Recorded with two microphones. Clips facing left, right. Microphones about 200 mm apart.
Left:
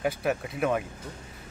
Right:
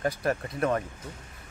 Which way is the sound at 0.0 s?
5° left (ahead or behind).